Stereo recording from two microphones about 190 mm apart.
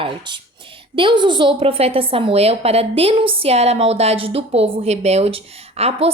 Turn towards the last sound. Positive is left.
turn(degrees=-30)  # may be behind; listen again after turning